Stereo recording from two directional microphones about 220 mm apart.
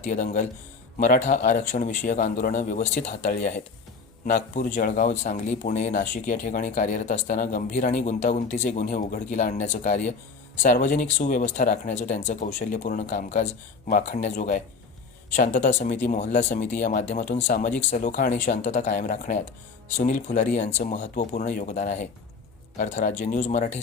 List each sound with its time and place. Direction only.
0.1 s speech: 35° left (ahead or behind)